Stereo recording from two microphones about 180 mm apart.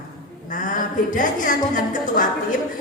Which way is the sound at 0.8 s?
45° left (ahead or behind).